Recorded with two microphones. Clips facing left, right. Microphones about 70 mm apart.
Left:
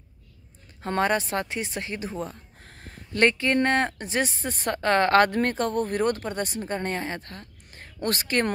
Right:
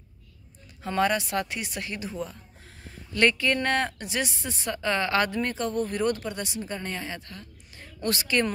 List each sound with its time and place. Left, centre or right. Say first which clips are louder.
0.8 s speech: left 1 dB; left